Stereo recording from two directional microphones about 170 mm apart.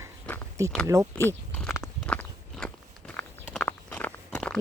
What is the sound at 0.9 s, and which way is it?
Speech, 15° right (ahead or behind).